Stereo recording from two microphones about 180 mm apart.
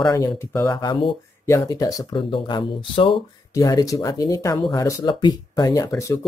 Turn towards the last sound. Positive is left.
turn(degrees=20)  # may be behind; listen again after turning